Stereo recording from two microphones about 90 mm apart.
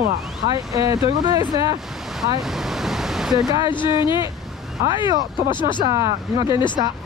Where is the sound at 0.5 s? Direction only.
45° right (ahead or behind).